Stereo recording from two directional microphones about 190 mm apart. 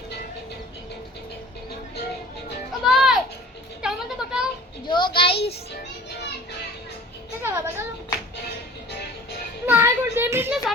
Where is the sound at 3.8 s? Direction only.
5° right (ahead or behind).